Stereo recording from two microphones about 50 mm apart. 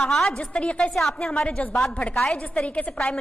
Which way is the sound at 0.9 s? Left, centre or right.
Centre.